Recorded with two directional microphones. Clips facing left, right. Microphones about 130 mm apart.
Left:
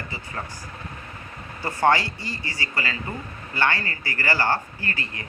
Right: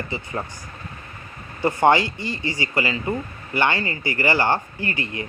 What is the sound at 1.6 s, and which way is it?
Speech, 20° right (ahead or behind).